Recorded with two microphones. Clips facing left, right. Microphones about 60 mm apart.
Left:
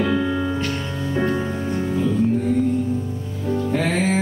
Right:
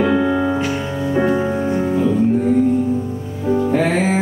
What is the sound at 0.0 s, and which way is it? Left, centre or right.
Music, centre.